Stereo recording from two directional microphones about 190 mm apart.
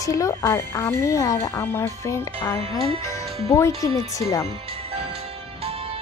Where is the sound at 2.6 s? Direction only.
30° right (ahead or behind).